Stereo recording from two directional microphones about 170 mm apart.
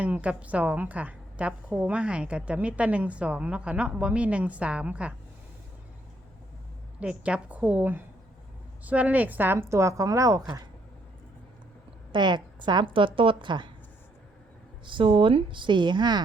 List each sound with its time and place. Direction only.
0.0 s a woman's voice: 10° right (ahead or behind)
7.0 s a woman's voice: 5° right (ahead or behind)
12.1 s a woman's voice: 25° right (ahead or behind)
14.8 s a woman's voice: 30° right (ahead or behind)